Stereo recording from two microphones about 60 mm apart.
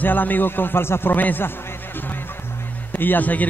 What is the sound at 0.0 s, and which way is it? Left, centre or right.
A man's voice, left.